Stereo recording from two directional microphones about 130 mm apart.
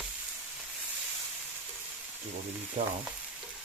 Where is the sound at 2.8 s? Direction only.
50° right (ahead or behind).